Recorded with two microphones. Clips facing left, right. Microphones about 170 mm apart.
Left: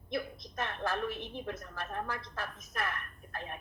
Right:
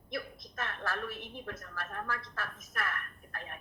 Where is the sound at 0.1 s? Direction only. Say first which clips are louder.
Left 3 dB; 20° left (ahead or behind).